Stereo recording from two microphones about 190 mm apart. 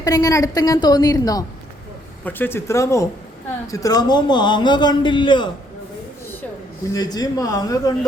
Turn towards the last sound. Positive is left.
turn(degrees=20)  # may be behind; listen again after turning